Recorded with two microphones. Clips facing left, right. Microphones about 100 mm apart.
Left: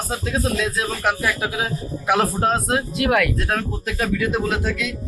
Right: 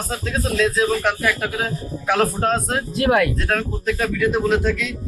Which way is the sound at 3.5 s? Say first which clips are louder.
Right 3 dB; 5° left (ahead or behind).